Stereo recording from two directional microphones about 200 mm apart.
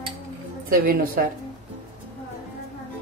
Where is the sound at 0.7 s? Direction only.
45° right (ahead or behind).